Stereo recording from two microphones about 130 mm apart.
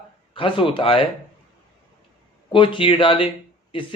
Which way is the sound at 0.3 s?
40° left (ahead or behind).